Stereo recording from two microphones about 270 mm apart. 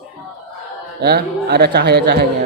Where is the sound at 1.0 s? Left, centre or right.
Right.